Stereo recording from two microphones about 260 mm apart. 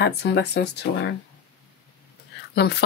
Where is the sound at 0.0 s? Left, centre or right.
Left.